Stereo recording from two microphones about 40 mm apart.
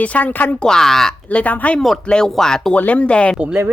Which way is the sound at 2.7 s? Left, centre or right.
Left.